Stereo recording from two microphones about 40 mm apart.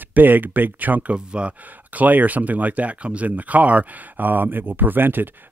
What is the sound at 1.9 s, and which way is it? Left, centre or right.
Speech, right.